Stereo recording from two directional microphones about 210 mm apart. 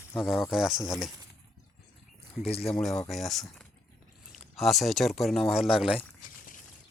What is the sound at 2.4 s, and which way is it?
Speech, 30° left (ahead or behind).